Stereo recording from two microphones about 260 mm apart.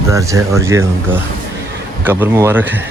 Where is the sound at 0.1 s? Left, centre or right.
Centre.